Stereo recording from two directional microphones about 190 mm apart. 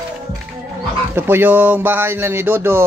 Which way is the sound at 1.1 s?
10° right (ahead or behind).